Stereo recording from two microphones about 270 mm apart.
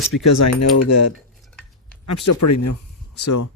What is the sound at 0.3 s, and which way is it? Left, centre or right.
Speech, left.